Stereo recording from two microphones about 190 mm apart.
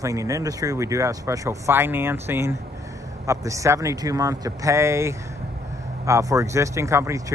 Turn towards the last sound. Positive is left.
turn(degrees=-15)  # may be behind; listen again after turning